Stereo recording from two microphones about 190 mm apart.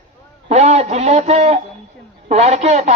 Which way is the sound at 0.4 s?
35° right (ahead or behind).